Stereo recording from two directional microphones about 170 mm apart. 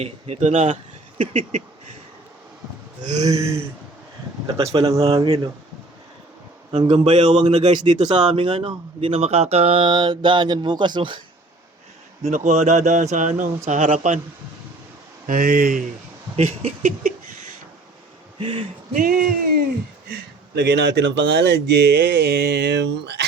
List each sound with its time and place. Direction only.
0.0 s speech: 40° right (ahead or behind)
3.2 s a sound: 20° right (ahead or behind)
4.4 s a man's voice: 30° right (ahead or behind)
6.8 s a man's voice: 40° right (ahead or behind)
12.2 s speech: 45° right (ahead or behind)
15.3 s speech: 55° right (ahead or behind)
16.3 s a man's voice: 40° right (ahead or behind)
18.3 s speech: 35° right (ahead or behind)
18.9 s speech: 55° right (ahead or behind)
20.6 s speech: 80° right